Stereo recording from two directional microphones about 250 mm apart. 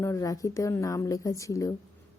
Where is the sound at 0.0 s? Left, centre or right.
Centre.